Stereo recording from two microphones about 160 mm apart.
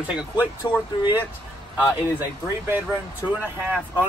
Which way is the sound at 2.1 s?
15° right (ahead or behind).